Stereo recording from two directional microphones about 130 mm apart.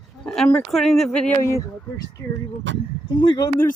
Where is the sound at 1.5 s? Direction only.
25° left (ahead or behind).